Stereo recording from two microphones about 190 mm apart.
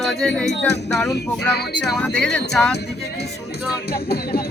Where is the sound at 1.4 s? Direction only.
60° left (ahead or behind).